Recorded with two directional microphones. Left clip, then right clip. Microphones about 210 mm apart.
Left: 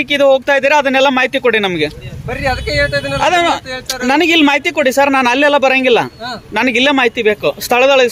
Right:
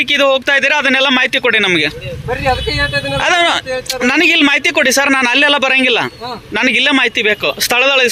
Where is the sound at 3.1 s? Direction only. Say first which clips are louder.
Right 2 dB; centre (ahead or behind).